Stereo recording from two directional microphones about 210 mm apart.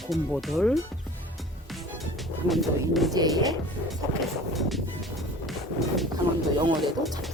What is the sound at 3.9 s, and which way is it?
Music, centre (ahead or behind).